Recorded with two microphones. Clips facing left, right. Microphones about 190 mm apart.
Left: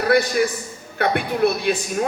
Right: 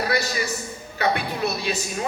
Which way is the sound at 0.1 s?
55° left (ahead or behind).